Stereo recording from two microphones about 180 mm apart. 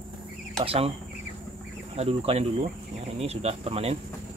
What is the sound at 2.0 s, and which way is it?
Speech, 35° right (ahead or behind).